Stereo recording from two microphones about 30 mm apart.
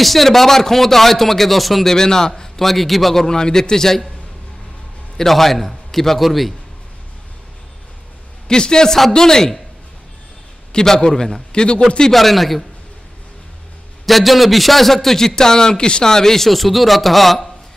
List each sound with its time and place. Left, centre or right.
0.0 s a man's voice: centre
1.9 s a man's voice: centre
2.6 s speech: centre
3.3 s a man's voice: left
5.3 s speech: centre
8.5 s a man's voice: left
10.9 s a man's voice: left
11.5 s a man's voice: left
12.1 s speech: centre
14.0 s a man's voice: centre